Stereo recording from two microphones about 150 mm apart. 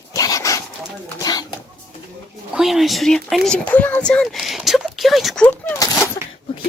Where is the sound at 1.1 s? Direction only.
25° left (ahead or behind).